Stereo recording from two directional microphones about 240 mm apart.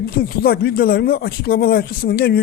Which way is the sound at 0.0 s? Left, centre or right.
Left.